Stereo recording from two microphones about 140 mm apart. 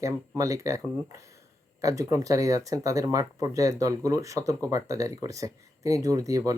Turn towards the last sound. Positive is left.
turn(degrees=-25)  # may be behind; listen again after turning